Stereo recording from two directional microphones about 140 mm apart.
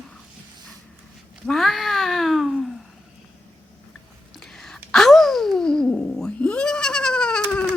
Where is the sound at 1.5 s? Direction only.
Centre (ahead or behind).